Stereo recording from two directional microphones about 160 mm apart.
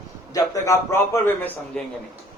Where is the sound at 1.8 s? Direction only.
5° left (ahead or behind).